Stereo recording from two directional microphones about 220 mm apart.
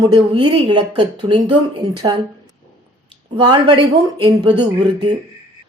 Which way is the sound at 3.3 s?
20° right (ahead or behind).